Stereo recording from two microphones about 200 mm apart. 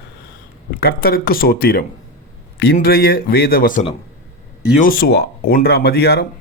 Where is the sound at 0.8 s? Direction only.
50° left (ahead or behind).